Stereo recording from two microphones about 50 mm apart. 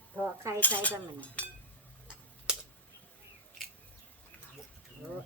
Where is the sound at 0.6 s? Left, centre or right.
Left.